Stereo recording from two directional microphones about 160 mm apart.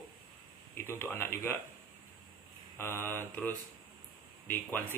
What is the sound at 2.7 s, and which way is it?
Speech, 15° left (ahead or behind).